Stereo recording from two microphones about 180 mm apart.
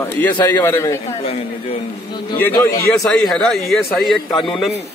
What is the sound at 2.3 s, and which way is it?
Speech, 10° left (ahead or behind).